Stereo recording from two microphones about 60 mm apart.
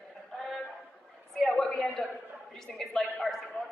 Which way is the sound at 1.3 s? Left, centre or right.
Centre.